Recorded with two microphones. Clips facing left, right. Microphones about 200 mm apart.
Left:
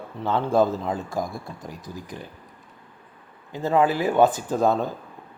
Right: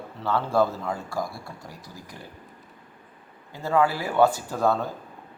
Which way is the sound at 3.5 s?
20° left (ahead or behind).